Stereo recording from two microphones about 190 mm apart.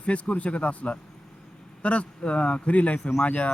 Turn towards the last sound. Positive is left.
turn(degrees=5)  # may be behind; listen again after turning